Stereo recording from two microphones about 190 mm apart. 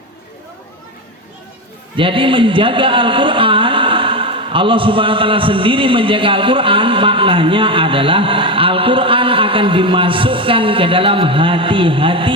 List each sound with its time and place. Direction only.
2.0 s a man's voice: 25° right (ahead or behind)